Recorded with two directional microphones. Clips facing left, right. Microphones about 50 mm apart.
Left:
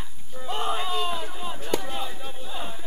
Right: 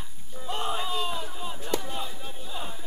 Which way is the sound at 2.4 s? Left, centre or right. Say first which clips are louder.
Left 2 dB; left.